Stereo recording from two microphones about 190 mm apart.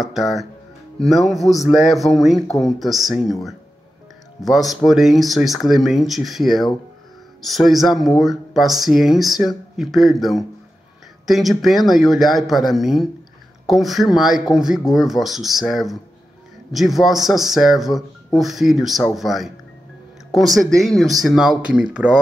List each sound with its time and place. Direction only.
0.0 s speech: centre (ahead or behind)
4.4 s speech: centre (ahead or behind)